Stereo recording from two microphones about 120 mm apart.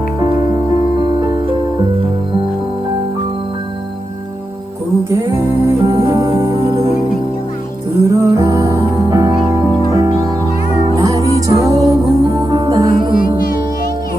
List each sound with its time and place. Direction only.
1.2 s music: 35° right (ahead or behind)
5.3 s music: 20° right (ahead or behind)
8.0 s music: 25° right (ahead or behind)